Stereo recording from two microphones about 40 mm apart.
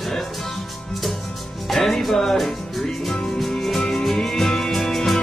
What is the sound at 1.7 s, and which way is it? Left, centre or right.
Music, centre.